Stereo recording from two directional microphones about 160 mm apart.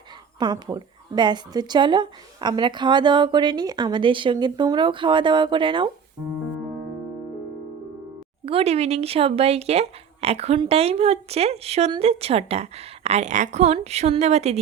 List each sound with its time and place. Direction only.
0.3 s a woman's voice: 25° right (ahead or behind)
8.4 s a woman's voice: 40° right (ahead or behind)